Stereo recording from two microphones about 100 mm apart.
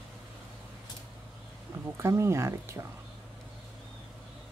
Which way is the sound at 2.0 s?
30° right (ahead or behind).